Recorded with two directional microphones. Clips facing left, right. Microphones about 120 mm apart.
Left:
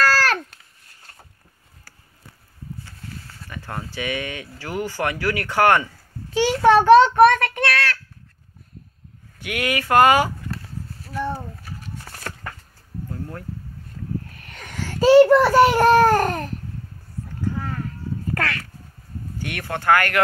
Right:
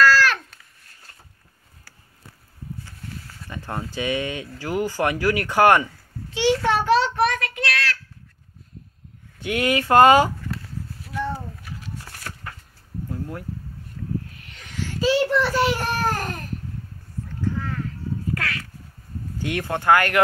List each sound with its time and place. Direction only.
0.0 s babbling: 45° left (ahead or behind)
3.4 s speech: 20° right (ahead or behind)
6.4 s child singing: 40° left (ahead or behind)
9.4 s speech: 20° right (ahead or behind)
13.1 s speech: 15° right (ahead or behind)
14.3 s a sound: 50° left (ahead or behind)
18.3 s cat: 55° left (ahead or behind)
19.4 s speech: 20° right (ahead or behind)